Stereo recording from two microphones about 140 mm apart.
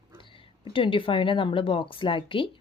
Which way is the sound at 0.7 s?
40° left (ahead or behind).